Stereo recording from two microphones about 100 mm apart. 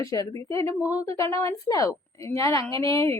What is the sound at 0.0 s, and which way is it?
A woman's voice, 35° left (ahead or behind).